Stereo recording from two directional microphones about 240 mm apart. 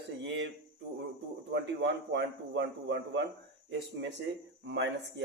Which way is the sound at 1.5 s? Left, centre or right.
Right.